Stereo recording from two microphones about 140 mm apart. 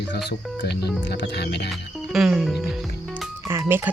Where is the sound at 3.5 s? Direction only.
15° right (ahead or behind).